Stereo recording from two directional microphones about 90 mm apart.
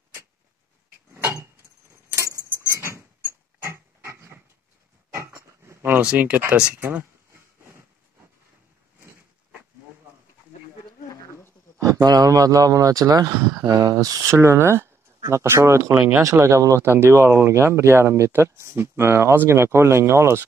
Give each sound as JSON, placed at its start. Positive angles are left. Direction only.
{"t": 1.1, "sound": "a sound", "side_deg": -30}
{"t": 5.9, "sound": "speech", "side_deg": -15}
{"t": 11.8, "sound": "speech", "side_deg": -40}